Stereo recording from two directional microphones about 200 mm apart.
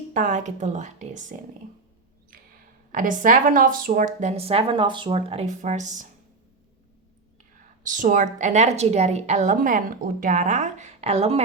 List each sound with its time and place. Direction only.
0.1 s a woman's voice: 40° right (ahead or behind)
2.9 s a woman's voice: 40° right (ahead or behind)
7.9 s a woman's voice: 40° right (ahead or behind)